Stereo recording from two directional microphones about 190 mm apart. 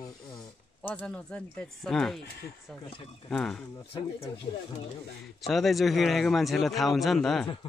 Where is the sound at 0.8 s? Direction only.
10° left (ahead or behind).